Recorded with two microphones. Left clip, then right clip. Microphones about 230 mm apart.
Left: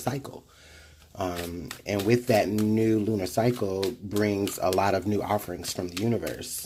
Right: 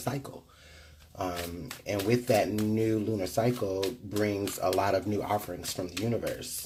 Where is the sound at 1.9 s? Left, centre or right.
Left.